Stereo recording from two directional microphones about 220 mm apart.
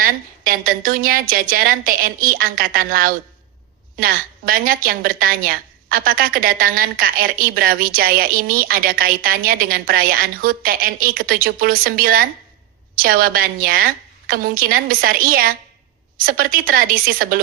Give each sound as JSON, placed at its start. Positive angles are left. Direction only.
{"t": 0.0, "sound": "a woman's voice", "side_deg": -40}